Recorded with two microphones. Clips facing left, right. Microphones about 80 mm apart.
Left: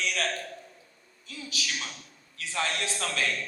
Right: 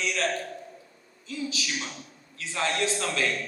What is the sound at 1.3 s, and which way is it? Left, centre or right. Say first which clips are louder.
A man's voice: right 4 dB; right.